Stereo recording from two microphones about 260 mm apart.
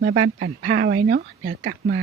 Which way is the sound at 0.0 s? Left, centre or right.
Right.